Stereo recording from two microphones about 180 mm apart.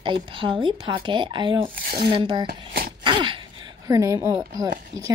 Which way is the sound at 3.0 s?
25° right (ahead or behind).